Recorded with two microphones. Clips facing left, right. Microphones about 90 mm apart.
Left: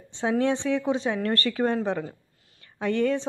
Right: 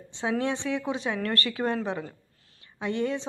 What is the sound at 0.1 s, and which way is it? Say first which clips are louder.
A woman's voice: left 4 dB; 35° left (ahead or behind).